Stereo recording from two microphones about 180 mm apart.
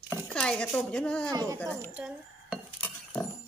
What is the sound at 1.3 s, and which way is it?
Speech, 20° right (ahead or behind).